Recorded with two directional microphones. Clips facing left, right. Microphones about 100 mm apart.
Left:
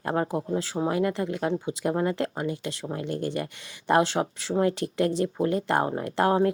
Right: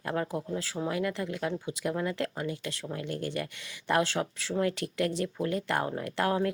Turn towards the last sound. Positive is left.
turn(degrees=30)  # may be behind; listen again after turning